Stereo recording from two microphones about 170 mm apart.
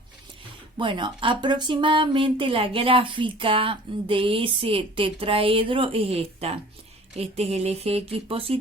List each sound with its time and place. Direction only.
0.8 s speech: 30° right (ahead or behind)